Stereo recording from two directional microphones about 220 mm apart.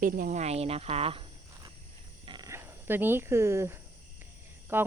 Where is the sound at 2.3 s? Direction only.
15° right (ahead or behind).